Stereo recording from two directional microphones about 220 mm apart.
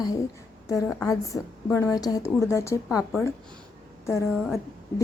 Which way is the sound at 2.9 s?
5° right (ahead or behind).